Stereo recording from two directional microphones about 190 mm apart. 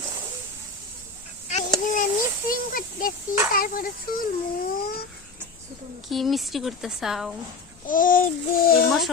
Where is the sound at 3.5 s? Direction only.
50° left (ahead or behind).